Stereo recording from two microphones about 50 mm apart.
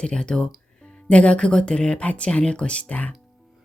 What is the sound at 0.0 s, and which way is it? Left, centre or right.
Speech, centre.